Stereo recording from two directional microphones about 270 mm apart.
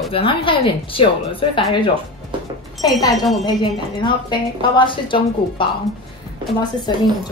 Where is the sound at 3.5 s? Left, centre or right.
Centre.